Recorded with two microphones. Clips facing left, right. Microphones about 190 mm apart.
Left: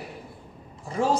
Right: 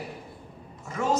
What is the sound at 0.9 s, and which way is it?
Speech, 30° left (ahead or behind).